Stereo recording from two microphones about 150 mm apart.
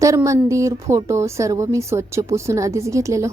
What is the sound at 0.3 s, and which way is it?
Speech, 20° right (ahead or behind).